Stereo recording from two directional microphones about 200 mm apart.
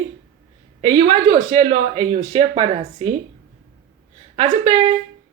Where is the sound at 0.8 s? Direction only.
30° right (ahead or behind).